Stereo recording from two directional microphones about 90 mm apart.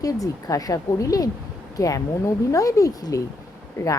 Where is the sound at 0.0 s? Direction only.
40° left (ahead or behind).